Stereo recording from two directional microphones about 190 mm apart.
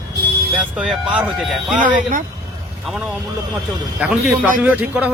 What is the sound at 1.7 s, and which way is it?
Speech, 45° right (ahead or behind).